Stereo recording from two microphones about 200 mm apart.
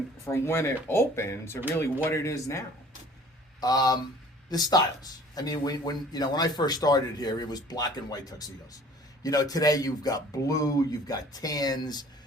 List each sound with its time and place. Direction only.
0.3 s a man's voice: 10° left (ahead or behind)